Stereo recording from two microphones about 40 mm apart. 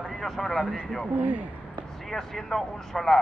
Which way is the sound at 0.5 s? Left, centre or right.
Left.